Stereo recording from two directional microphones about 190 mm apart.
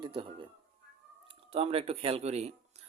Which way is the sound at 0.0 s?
25° right (ahead or behind).